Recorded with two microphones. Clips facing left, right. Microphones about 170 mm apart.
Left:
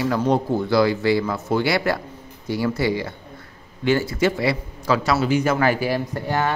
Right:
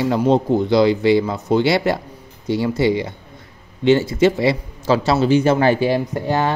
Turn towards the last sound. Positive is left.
turn(degrees=-20)  # may be behind; listen again after turning